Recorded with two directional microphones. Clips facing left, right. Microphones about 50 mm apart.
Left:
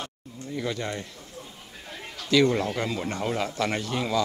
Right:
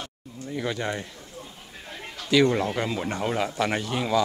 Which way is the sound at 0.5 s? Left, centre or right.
Right.